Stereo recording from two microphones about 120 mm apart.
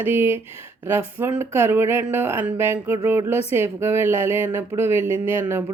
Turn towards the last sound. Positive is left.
turn(degrees=-20)  # may be behind; listen again after turning